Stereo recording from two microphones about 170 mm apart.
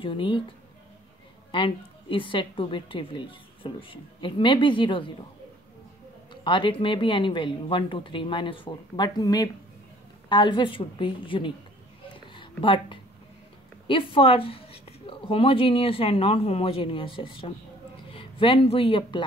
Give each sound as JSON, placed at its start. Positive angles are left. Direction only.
{"t": 0.0, "sound": "a woman's voice", "side_deg": 30}
{"t": 1.5, "sound": "a woman's voice", "side_deg": 30}
{"t": 6.3, "sound": "a woman's voice", "side_deg": 30}